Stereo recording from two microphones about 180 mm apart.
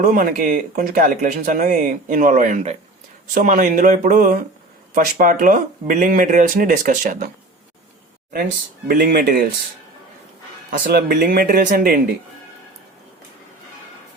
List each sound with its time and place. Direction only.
0.0 s speech: 50° right (ahead or behind)
8.9 s speech: 50° right (ahead or behind)
10.7 s speech: 55° right (ahead or behind)